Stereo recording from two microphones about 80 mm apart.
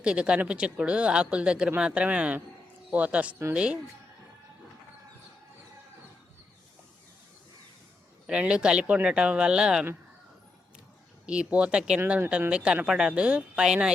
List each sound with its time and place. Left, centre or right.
0.0 s speech: centre
8.3 s speech: centre
11.3 s speech: centre